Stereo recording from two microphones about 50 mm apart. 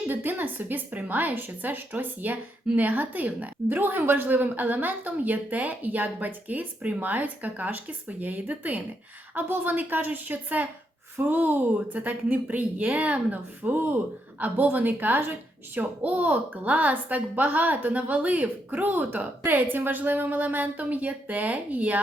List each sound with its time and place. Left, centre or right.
0.1 s a woman's voice: right